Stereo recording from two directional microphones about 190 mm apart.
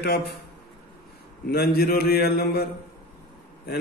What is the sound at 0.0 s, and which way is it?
Speech, 60° left (ahead or behind).